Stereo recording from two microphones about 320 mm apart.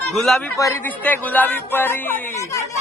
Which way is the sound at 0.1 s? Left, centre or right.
Centre.